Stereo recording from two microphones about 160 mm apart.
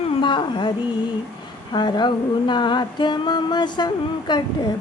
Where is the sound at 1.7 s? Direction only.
30° left (ahead or behind).